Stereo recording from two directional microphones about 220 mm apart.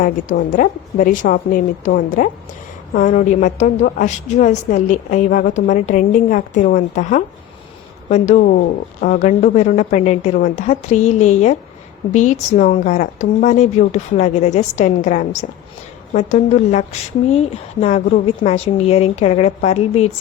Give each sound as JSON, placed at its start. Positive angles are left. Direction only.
{"t": 0.0, "sound": "a woman's voice", "side_deg": 40}